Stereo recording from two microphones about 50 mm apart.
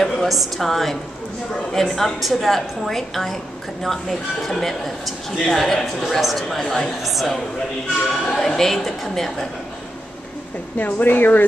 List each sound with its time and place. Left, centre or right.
0.0 s a sound: centre
0.3 s speech: centre
8.1 s speech: centre
10.8 s speech: left